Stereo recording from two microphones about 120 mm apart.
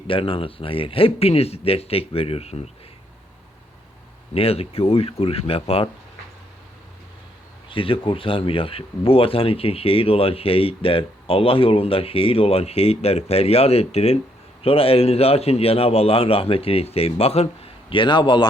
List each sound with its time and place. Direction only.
0.1 s speech: 45° left (ahead or behind)
4.4 s speech: 55° left (ahead or behind)
7.7 s speech: 45° left (ahead or behind)